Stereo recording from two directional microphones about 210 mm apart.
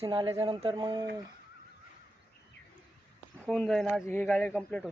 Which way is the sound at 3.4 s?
5° left (ahead or behind).